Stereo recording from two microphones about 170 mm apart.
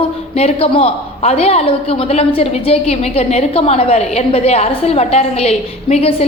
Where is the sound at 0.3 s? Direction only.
35° left (ahead or behind).